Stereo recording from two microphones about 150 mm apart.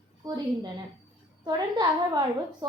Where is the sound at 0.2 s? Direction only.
25° right (ahead or behind).